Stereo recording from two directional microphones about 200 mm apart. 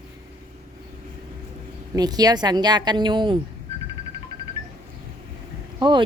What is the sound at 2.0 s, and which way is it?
Speech, 20° right (ahead or behind).